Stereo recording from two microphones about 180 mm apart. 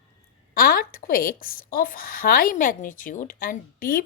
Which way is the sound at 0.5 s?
55° left (ahead or behind).